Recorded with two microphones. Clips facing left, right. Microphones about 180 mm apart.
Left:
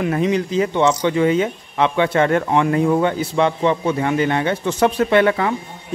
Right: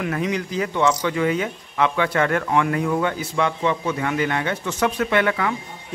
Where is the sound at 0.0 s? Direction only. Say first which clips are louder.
Left 5 dB; 25° left (ahead or behind).